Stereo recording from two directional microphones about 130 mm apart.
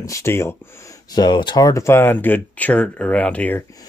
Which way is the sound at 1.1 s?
35° left (ahead or behind).